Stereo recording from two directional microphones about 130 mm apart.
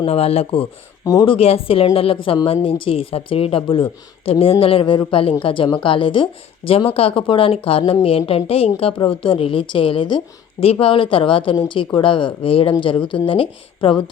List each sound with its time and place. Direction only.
0.0 s speech: 50° left (ahead or behind)
1.0 s a woman's voice: 35° left (ahead or behind)